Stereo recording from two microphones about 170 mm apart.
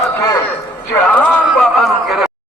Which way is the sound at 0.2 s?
15° left (ahead or behind).